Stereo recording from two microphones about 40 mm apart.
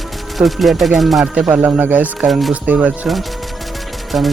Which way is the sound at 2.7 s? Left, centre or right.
Right.